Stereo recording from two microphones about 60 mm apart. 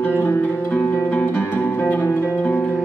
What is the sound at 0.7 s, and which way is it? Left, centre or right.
Music, left.